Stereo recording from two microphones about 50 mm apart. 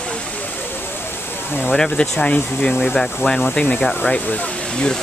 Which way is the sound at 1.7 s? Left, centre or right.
Centre.